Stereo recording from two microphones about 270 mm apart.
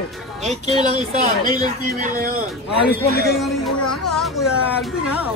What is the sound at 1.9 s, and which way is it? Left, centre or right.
Speech, right.